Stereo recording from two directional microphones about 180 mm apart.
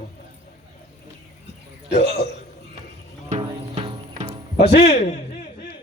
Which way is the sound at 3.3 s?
35° right (ahead or behind).